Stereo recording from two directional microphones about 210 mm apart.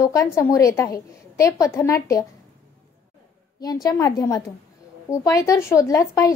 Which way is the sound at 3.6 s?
15° left (ahead or behind).